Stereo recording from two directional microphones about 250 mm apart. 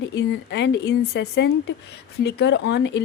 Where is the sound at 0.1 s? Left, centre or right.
Left.